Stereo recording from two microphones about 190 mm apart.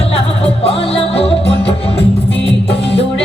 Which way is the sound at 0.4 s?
30° left (ahead or behind).